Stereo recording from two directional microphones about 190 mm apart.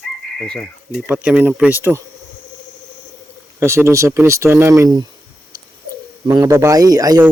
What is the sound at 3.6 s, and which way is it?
Speech, 15° right (ahead or behind).